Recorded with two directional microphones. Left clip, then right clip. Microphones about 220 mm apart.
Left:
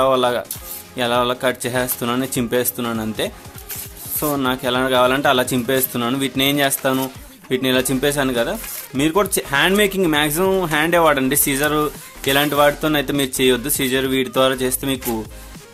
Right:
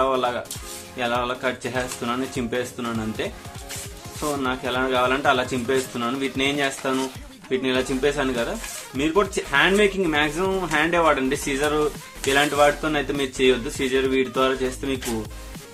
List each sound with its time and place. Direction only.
0.0 s speech: 50° left (ahead or behind)